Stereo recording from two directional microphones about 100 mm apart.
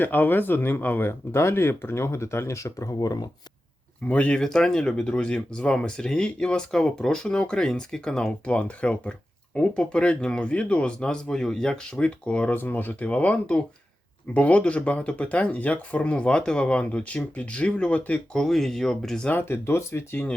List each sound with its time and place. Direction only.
0.0 s speech: 20° left (ahead or behind); by 3.2 s 40° left (ahead or behind)
4.0 s speech: 15° left (ahead or behind)
19.3 s speech: 20° left (ahead or behind)